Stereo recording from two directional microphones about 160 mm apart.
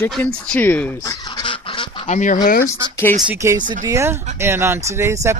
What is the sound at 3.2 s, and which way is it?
Speech, 15° right (ahead or behind).